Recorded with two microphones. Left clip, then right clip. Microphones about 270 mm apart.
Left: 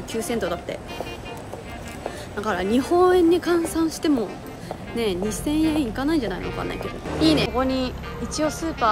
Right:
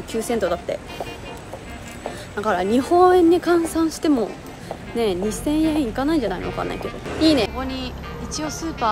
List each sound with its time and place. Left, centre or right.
0.1 s speech: centre
2.4 s speech: centre